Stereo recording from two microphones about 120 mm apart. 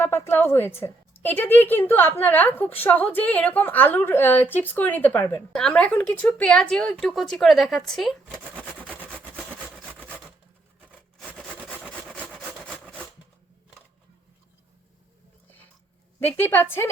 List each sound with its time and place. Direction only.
0.0 s a woman's voice: 20° left (ahead or behind); by 8.1 s centre (ahead or behind)
11.3 s wood: 10° left (ahead or behind)
16.2 s a woman's voice: 15° left (ahead or behind)